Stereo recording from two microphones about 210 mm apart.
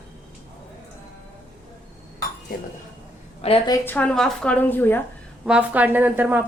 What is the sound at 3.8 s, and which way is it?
A woman's voice, 10° left (ahead or behind).